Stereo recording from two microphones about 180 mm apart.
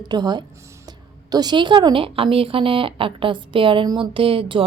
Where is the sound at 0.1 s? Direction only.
25° right (ahead or behind).